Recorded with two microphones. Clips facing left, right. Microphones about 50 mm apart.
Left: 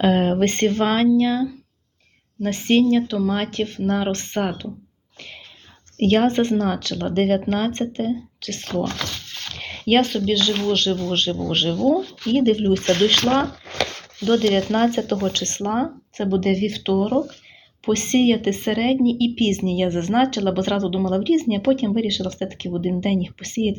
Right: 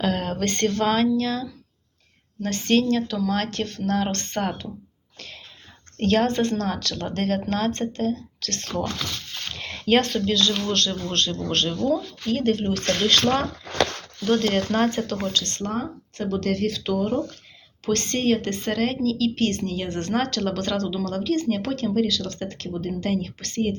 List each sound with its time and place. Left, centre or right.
0.0 s speech: left; by 4.7 s centre
6.0 s speech: left; by 12.3 s centre
12.3 s speech: centre
15.1 s speech: left